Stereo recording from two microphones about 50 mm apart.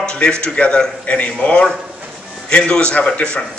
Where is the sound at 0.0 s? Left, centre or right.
Centre.